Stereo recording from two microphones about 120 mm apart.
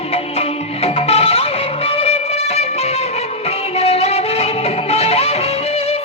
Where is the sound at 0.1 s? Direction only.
55° left (ahead or behind).